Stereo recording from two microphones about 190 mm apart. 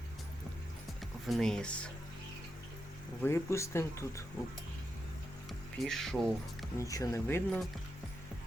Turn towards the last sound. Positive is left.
turn(degrees=15)  # may be behind; listen again after turning